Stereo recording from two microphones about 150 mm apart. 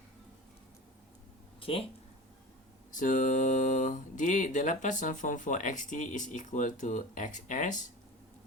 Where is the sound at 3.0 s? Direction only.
60° left (ahead or behind).